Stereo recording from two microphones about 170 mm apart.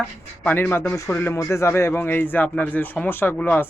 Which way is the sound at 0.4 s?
15° left (ahead or behind).